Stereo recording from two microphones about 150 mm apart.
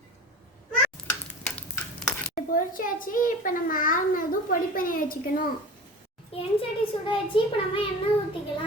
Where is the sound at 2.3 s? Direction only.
65° left (ahead or behind).